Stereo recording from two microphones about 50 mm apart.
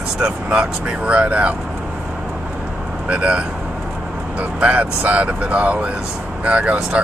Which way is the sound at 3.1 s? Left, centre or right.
Right.